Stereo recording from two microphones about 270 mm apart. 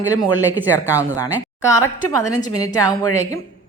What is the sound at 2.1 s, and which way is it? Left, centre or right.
A woman's voice, centre.